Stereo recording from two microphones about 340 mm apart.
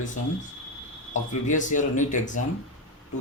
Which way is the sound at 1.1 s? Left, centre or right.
Left.